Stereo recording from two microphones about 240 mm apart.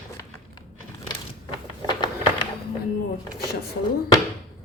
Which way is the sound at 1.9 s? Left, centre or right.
Centre.